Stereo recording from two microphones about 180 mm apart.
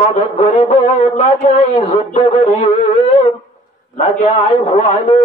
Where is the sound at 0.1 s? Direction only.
35° left (ahead or behind).